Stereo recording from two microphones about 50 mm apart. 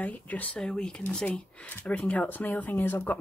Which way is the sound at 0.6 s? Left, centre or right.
Centre.